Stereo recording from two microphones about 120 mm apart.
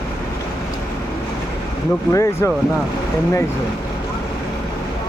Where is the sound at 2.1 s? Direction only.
25° left (ahead or behind).